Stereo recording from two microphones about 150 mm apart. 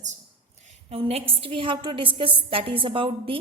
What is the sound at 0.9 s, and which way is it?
A woman's voice, 40° right (ahead or behind).